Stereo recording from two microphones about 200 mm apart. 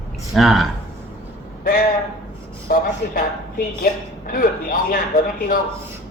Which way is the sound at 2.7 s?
45° left (ahead or behind).